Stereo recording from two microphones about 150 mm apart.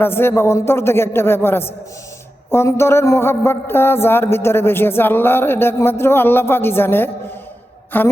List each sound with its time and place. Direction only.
0.0 s speech: 15° left (ahead or behind)